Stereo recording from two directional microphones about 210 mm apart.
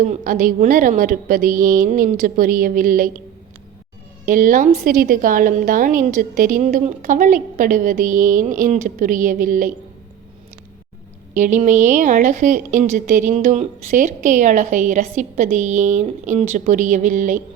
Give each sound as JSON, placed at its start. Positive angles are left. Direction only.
{"t": 0.0, "sound": "a woman's voice", "side_deg": -40}
{"t": 4.3, "sound": "a woman's voice", "side_deg": -40}
{"t": 11.3, "sound": "a woman's voice", "side_deg": -35}